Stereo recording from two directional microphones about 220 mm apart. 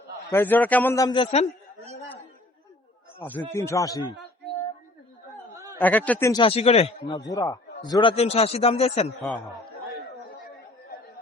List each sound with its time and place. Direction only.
0.3 s a man's voice: 10° left (ahead or behind); by 1.5 s 25° left (ahead or behind)
3.2 s a man's voice: 10° left (ahead or behind)
5.8 s a man's voice: 5° left (ahead or behind); by 9.0 s 30° left (ahead or behind)
9.2 s speech: centre (ahead or behind)